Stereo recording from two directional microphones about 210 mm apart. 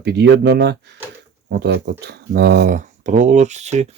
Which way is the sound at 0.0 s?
55° right (ahead or behind).